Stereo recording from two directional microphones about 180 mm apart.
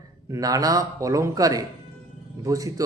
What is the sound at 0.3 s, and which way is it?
A man's voice, 20° right (ahead or behind).